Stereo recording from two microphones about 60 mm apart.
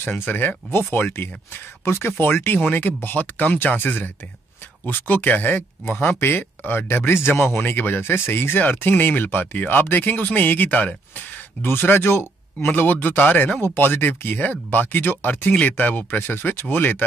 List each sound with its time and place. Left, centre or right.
0.0 s speech: left
11.6 s speech: left